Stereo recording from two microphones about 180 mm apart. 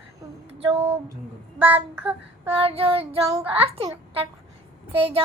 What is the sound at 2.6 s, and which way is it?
A child's voice, 30° right (ahead or behind).